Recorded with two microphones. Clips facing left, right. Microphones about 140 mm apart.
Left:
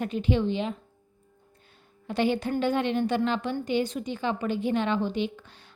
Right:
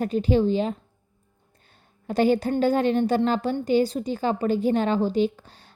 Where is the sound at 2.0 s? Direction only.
40° right (ahead or behind).